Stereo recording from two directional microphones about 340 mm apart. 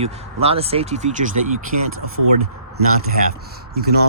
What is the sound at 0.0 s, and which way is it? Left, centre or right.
Speech, centre.